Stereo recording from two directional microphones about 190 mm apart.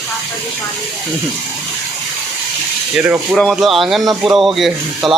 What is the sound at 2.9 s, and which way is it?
Speech, centre (ahead or behind).